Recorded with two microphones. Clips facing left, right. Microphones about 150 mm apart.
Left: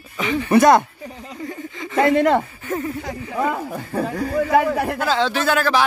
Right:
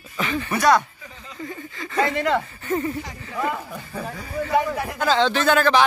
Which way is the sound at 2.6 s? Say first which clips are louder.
Right 1 dB; centre (ahead or behind).